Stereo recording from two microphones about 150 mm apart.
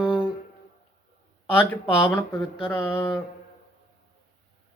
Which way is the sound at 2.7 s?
15° left (ahead or behind).